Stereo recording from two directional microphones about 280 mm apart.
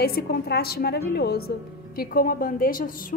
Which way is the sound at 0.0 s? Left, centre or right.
Left.